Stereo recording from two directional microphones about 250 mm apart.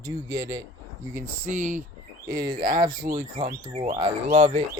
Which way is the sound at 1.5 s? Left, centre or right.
Right.